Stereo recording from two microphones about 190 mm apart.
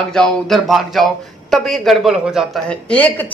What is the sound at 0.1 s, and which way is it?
A man's voice, centre (ahead or behind).